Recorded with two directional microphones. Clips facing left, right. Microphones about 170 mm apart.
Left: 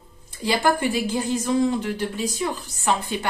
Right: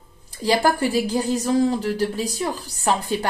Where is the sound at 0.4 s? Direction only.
35° right (ahead or behind).